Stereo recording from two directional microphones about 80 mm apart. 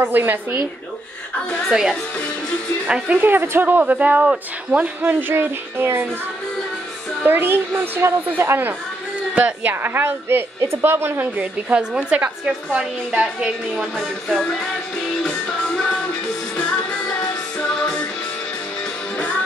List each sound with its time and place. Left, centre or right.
0.0 s a woman's voice: right
1.7 s a woman's voice: centre
3.2 s a woman's voice: right
5.3 s a woman's voice: right
7.2 s a woman's voice: right
11.3 s a woman's voice: centre
13.9 s music: centre
17.7 s music: centre